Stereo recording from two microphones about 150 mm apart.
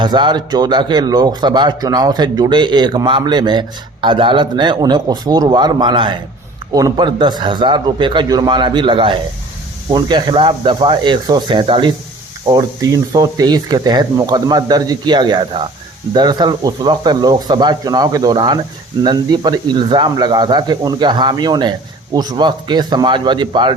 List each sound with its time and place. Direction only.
0.0 s a man's voice: 30° right (ahead or behind)